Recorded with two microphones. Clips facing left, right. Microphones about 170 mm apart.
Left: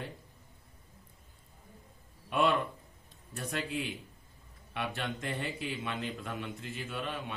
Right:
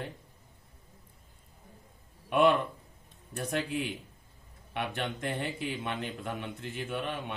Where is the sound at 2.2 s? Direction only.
60° right (ahead or behind).